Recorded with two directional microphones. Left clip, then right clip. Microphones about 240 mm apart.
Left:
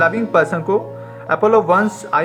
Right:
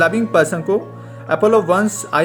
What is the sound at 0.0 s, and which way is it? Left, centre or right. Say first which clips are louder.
Speech: even; right.